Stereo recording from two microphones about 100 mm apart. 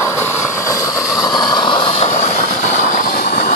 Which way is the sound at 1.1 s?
40° left (ahead or behind).